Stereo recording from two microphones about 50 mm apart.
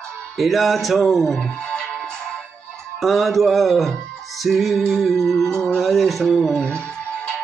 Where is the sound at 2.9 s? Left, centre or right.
Centre.